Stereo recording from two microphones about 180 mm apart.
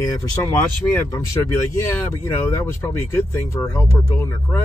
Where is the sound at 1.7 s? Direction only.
15° left (ahead or behind).